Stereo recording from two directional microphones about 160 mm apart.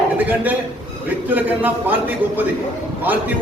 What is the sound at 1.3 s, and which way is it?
A man's voice, 10° right (ahead or behind).